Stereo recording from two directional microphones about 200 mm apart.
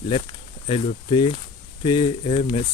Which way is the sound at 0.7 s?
30° left (ahead or behind).